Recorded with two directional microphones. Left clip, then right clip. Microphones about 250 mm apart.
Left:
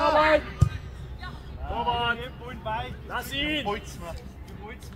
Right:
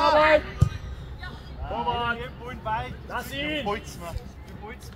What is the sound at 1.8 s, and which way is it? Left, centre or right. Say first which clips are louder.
Speech: left 1 dB; left.